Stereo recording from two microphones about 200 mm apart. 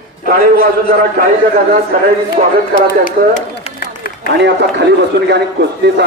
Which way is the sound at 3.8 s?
50° left (ahead or behind).